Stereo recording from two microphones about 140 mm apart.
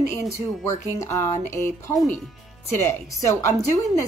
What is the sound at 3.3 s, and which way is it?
Speech, 20° left (ahead or behind).